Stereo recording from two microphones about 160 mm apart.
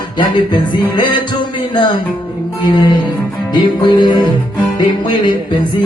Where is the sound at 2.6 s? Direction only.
25° left (ahead or behind).